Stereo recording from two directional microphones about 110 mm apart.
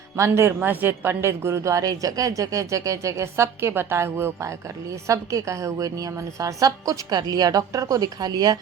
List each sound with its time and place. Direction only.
0.2 s speech: 25° right (ahead or behind)